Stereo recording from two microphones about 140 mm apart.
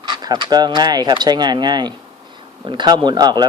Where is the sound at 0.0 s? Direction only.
30° right (ahead or behind).